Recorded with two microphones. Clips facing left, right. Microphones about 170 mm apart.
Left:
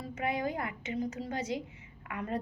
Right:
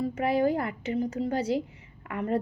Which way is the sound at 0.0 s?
30° right (ahead or behind).